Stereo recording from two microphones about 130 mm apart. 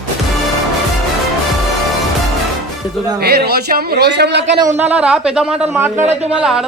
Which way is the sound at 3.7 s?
90° right.